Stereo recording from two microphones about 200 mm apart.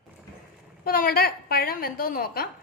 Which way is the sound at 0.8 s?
50° left (ahead or behind).